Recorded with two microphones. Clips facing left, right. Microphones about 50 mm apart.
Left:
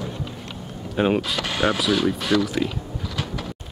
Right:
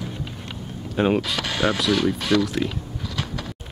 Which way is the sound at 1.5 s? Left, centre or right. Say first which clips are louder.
Left 1 dB; centre.